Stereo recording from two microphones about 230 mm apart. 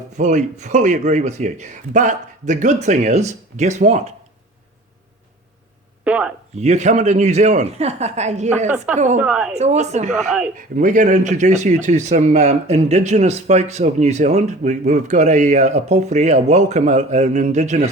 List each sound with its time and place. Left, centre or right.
0.2 s speech: right
6.1 s speech: centre
6.6 s speech: right
9.1 s speech: centre
9.6 s speech: right
10.1 s speech: centre
10.5 s speech: right